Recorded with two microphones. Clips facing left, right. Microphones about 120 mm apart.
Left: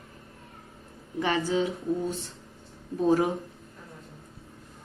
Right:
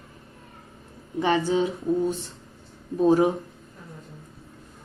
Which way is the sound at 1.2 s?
25° right (ahead or behind).